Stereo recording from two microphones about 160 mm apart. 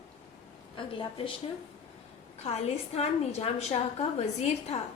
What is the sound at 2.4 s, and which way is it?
A woman's voice, 40° left (ahead or behind).